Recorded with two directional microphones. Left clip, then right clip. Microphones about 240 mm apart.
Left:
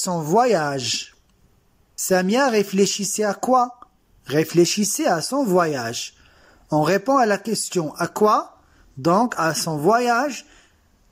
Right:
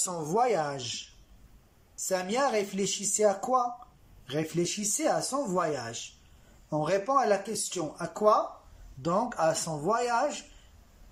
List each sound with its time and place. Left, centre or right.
0.0 s speech: left
2.0 s speech: left